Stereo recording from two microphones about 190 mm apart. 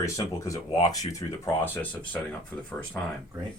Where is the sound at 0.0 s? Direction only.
15° left (ahead or behind).